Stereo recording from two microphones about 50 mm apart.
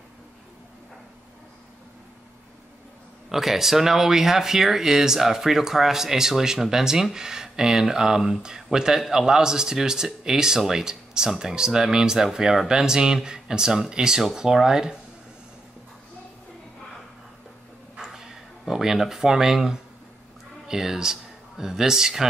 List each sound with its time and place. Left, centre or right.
3.3 s speech: centre
17.9 s a sound: centre
20.6 s speech: centre